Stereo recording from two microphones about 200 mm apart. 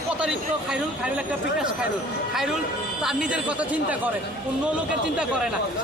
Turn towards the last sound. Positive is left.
turn(degrees=-5)  # may be behind; listen again after turning